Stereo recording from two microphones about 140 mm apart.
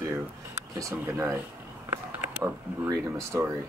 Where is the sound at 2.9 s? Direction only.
20° right (ahead or behind).